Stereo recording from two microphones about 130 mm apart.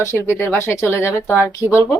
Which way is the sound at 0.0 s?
20° left (ahead or behind).